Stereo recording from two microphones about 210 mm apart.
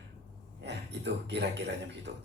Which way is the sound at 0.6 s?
55° right (ahead or behind).